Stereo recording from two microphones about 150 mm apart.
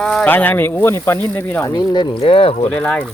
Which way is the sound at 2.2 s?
40° left (ahead or behind).